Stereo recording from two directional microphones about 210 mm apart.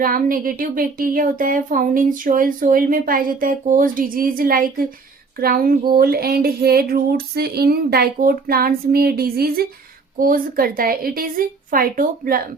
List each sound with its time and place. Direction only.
0.0 s speech: 40° right (ahead or behind)
5.4 s female singing: 45° right (ahead or behind)